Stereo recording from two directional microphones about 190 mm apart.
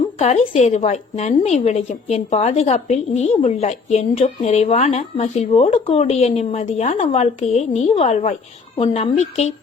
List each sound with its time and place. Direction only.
0.2 s a woman's voice: 35° left (ahead or behind)